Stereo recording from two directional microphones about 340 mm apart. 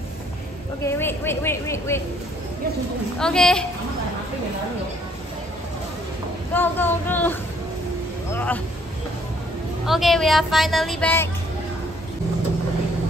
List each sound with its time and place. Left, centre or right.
0.8 s a woman's voice: centre
3.2 s a woman's voice: centre
6.5 s a woman's voice: centre
8.3 s music: centre
9.8 s a woman's voice: centre